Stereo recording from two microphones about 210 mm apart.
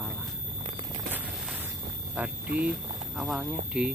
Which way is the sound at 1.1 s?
10° right (ahead or behind).